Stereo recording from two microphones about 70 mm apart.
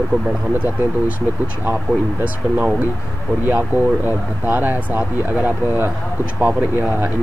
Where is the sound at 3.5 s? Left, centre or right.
Right.